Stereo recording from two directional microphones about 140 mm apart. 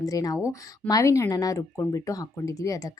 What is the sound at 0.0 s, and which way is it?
Speech, 25° left (ahead or behind).